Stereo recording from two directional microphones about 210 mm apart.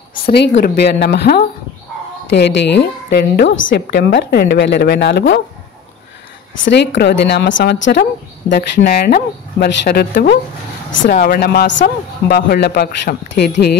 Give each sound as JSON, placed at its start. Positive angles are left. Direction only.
{"t": 0.3, "sound": "a man's voice", "side_deg": 50}
{"t": 3.8, "sound": "a man's voice", "side_deg": 55}
{"t": 6.6, "sound": "a man's voice", "side_deg": 55}
{"t": 10.9, "sound": "speech", "side_deg": 65}
{"t": 11.1, "sound": "a man's voice", "side_deg": 45}